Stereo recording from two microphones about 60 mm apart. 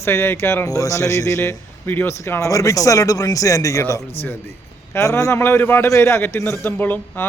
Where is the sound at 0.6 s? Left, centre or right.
Left.